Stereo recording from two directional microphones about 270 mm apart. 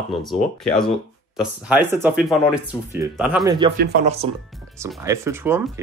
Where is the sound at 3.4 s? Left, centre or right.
Centre.